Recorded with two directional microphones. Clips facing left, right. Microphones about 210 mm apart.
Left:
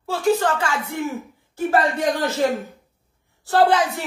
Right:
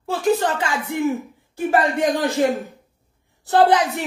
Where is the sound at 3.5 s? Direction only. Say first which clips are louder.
Right 1 dB; 20° right (ahead or behind).